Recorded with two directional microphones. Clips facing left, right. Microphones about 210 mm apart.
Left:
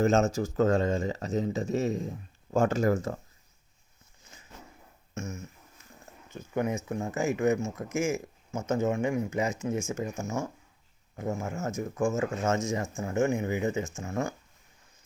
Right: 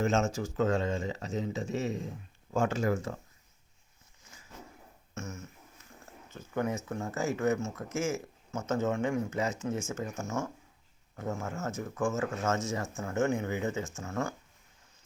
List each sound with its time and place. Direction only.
0.0 s speech: 40° left (ahead or behind)
5.1 s a sound: 15° left (ahead or behind)
6.3 s speech: 15° left (ahead or behind)